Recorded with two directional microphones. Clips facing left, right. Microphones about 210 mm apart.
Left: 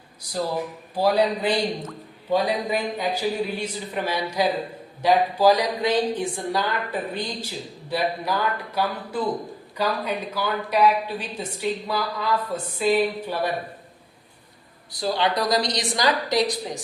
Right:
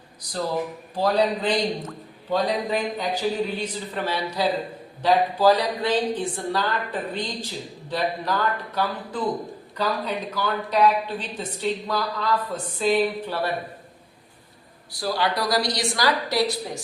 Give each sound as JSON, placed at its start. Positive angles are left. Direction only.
{"t": 0.9, "sound": "a woman's voice", "side_deg": 10}
{"t": 14.9, "sound": "a woman's voice", "side_deg": 20}